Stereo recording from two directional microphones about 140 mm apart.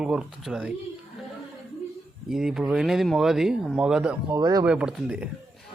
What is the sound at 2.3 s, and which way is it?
A man's voice, 5° right (ahead or behind).